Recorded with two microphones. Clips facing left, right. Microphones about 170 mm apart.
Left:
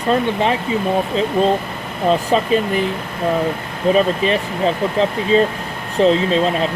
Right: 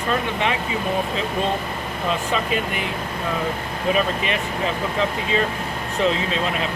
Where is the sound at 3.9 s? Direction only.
35° left (ahead or behind).